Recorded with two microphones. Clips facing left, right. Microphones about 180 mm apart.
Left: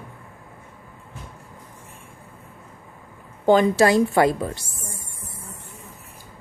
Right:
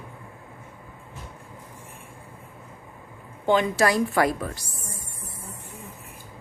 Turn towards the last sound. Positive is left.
turn(degrees=25)  # may be behind; listen again after turning